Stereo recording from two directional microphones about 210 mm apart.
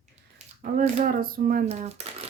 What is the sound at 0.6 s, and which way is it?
Speech, 40° right (ahead or behind).